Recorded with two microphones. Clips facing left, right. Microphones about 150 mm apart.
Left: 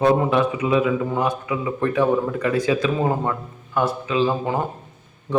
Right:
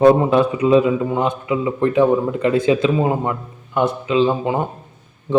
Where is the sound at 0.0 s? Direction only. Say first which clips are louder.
Right 5 dB; 35° right (ahead or behind).